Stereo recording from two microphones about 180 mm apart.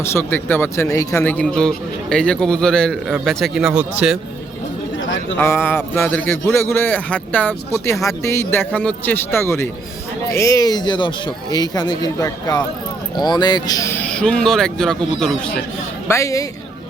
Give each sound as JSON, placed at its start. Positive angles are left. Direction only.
{"t": 0.0, "sound": "a man's voice", "side_deg": 15}
{"t": 5.4, "sound": "a man's voice", "side_deg": 15}
{"t": 16.0, "sound": "a man's voice", "side_deg": 15}